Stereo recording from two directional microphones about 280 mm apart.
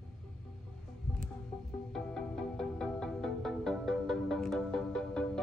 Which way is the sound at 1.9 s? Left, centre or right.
Centre.